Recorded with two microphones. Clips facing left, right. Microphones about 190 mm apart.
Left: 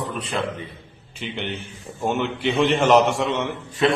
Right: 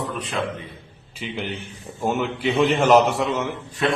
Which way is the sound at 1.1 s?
Centre (ahead or behind).